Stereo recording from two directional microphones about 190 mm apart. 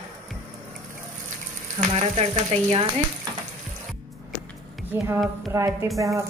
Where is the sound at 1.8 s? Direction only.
35° right (ahead or behind).